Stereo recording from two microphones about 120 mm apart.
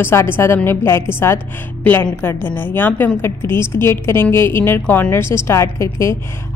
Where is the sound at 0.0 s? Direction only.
20° left (ahead or behind).